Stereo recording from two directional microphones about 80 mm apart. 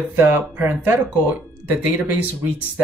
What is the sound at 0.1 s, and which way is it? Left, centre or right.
Speech, right.